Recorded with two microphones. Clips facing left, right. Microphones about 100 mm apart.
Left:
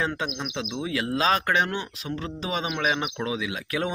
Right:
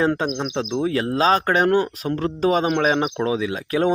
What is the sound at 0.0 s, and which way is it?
Speech, 40° right (ahead or behind).